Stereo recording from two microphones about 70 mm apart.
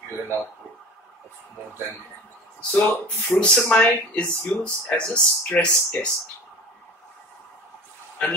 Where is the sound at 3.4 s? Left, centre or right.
Centre.